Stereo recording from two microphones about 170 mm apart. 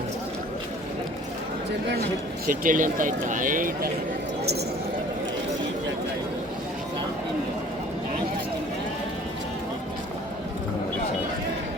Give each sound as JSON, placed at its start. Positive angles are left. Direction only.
{"t": 2.5, "sound": "speech", "side_deg": -50}